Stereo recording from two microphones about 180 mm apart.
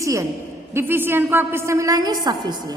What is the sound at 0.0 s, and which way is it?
A woman's voice, 15° right (ahead or behind).